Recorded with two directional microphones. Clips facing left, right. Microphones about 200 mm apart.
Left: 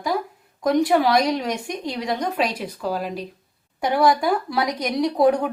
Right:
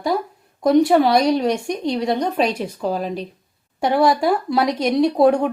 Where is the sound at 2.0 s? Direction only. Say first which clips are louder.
Right 4 dB; 25° right (ahead or behind).